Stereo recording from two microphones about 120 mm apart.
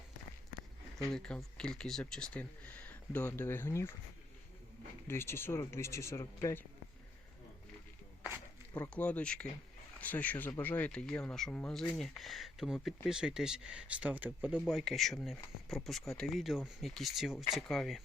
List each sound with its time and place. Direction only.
0.9 s speech: 5° left (ahead or behind); by 3.9 s 20° left (ahead or behind)
5.0 s speech: 20° left (ahead or behind)
8.9 s speech: 10° left (ahead or behind); by 14.6 s 15° right (ahead or behind)
14.7 s speech: centre (ahead or behind)